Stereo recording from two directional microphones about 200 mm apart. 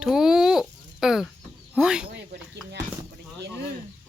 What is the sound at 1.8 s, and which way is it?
Speech, 5° right (ahead or behind).